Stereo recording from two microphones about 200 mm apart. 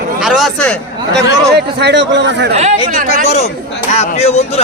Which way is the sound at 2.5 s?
35° right (ahead or behind).